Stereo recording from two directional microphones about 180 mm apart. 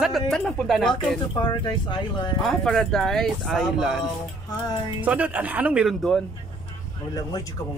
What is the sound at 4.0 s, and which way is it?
Speech, 20° left (ahead or behind).